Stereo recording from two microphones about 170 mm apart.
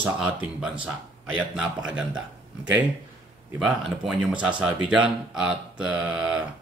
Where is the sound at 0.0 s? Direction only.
5° right (ahead or behind).